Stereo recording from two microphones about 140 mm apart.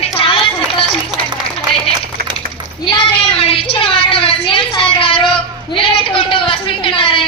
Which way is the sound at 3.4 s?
40° left (ahead or behind).